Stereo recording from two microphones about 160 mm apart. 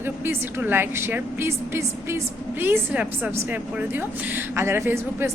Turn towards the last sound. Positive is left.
turn(degrees=-15)  # may be behind; listen again after turning